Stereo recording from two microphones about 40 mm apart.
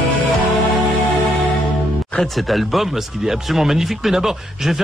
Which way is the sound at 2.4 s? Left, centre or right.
Centre.